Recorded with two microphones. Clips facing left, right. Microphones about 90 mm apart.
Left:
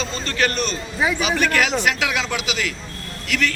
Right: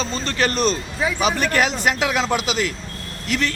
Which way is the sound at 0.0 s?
35° right (ahead or behind).